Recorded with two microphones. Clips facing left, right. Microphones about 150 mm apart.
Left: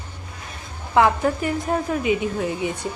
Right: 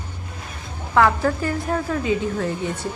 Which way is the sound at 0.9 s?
20° left (ahead or behind).